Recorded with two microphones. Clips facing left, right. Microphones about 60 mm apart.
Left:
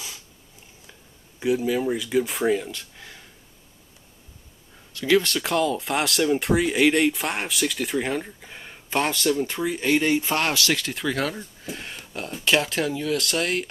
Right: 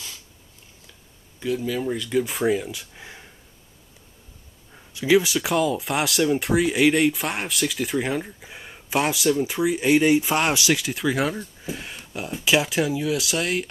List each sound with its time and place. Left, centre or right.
1.4 s speech: centre
3.0 s a sound: centre
4.9 s speech: centre